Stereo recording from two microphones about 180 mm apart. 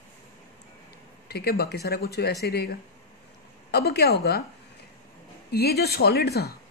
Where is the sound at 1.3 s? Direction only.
60° left (ahead or behind).